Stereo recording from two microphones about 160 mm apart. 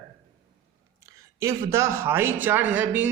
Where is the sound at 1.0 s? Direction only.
20° right (ahead or behind).